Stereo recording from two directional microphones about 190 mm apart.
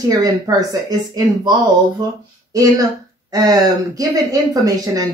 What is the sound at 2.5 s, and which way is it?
Speech, 20° right (ahead or behind).